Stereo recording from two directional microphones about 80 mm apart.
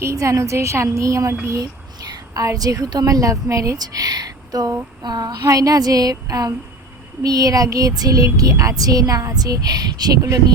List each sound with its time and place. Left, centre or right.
0.0 s a woman's voice: right